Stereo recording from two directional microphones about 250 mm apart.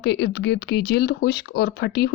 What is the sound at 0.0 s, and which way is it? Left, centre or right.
Speech, left.